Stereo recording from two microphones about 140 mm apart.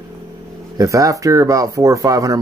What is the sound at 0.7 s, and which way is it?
Speech, 25° right (ahead or behind).